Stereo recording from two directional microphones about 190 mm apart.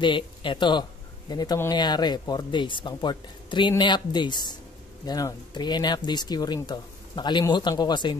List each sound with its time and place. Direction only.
0.0 s speech: 25° left (ahead or behind)